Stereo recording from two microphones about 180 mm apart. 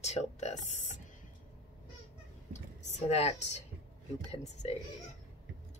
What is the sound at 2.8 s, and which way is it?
Speech, 40° left (ahead or behind).